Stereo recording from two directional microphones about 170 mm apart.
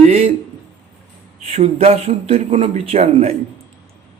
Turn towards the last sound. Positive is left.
turn(degrees=-40)  # may be behind; listen again after turning